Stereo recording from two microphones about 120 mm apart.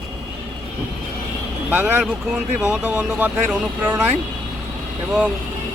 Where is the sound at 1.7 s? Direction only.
15° right (ahead or behind).